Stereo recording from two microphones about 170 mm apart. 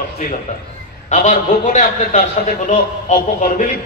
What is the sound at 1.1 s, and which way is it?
A man's voice, 45° left (ahead or behind).